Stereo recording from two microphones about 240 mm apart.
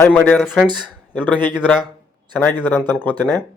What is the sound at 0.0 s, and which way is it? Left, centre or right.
A man's voice, centre.